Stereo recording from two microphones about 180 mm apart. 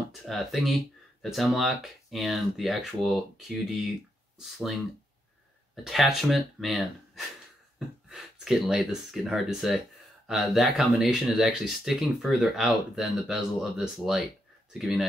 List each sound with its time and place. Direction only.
0.2 s speech: centre (ahead or behind)
5.9 s speech: centre (ahead or behind)